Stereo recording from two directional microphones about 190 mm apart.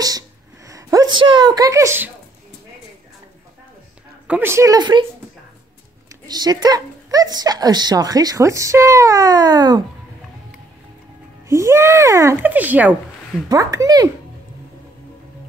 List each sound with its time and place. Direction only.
0.7 s a woman's voice: 15° right (ahead or behind)
4.3 s speech: 10° right (ahead or behind)
6.2 s speech: 20° right (ahead or behind)
11.4 s speech: 15° right (ahead or behind)
13.5 s speech: 20° right (ahead or behind)